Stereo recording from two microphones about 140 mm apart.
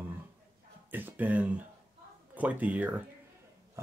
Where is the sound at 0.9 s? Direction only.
10° right (ahead or behind).